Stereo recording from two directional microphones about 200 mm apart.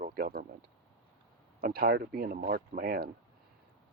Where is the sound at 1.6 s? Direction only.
50° right (ahead or behind).